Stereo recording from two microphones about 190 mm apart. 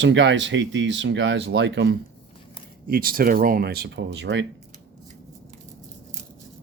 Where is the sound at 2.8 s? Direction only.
50° right (ahead or behind); by 4.5 s 70° right (ahead or behind).